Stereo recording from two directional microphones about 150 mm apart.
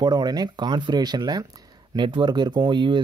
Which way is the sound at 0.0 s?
25° right (ahead or behind).